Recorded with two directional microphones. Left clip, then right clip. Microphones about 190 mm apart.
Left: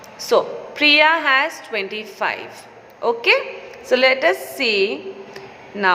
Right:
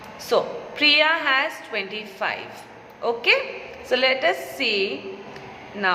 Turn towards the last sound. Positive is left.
turn(degrees=20)  # may be behind; listen again after turning